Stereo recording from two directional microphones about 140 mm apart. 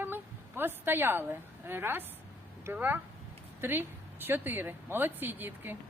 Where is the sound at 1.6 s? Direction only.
15° right (ahead or behind).